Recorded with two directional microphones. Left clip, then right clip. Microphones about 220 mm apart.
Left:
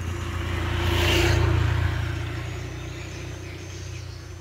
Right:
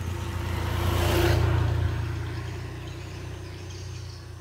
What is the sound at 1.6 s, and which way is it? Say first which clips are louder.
Vehicle: left 4 dB; 30° left (ahead or behind).